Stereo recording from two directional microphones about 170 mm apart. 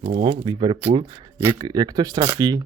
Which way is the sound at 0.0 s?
35° right (ahead or behind).